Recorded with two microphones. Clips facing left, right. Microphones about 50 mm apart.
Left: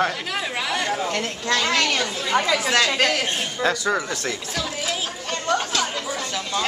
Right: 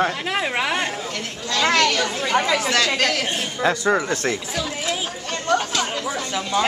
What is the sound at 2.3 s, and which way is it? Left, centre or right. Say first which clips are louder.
Speech: right 1 dB; right.